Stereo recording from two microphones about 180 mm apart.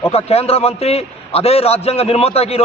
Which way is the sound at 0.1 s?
35° left (ahead or behind).